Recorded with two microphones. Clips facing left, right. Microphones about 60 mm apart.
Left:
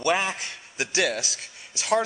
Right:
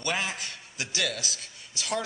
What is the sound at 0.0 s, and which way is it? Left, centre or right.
A man's voice, left.